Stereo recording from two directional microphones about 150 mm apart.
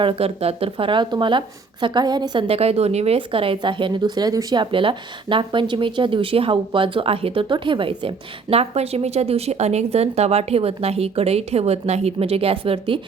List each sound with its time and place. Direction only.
0.0 s speech: 40° right (ahead or behind)
2.5 s speech: 45° right (ahead or behind)